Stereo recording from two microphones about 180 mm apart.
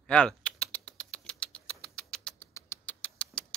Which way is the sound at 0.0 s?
5° left (ahead or behind).